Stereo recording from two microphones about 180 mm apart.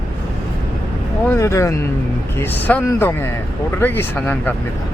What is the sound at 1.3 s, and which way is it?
Speech, 15° left (ahead or behind).